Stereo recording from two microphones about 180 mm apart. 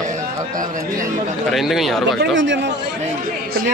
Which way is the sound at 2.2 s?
90° right.